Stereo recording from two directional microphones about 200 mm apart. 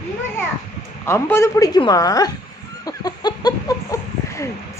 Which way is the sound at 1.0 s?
15° left (ahead or behind).